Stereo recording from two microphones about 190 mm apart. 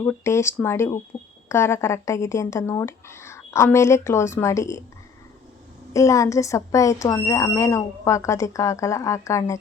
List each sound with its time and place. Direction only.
0.0 s speech: 15° left (ahead or behind)
5.9 s speech: 15° left (ahead or behind)